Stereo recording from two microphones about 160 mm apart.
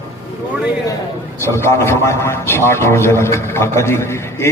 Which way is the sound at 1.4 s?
15° left (ahead or behind).